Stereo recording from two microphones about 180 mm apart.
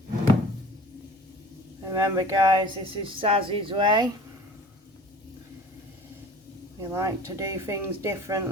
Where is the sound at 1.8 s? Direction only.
20° right (ahead or behind).